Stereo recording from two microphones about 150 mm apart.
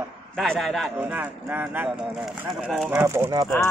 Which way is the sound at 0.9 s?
10° right (ahead or behind).